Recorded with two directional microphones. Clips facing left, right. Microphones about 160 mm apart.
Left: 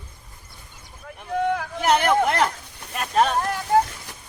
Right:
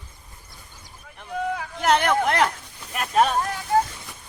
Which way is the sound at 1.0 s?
60° left (ahead or behind).